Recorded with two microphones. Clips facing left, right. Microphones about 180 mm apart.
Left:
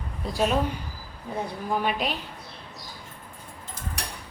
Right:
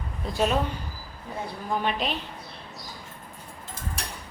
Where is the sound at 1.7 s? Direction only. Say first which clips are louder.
Left 1 dB; 10° left (ahead or behind).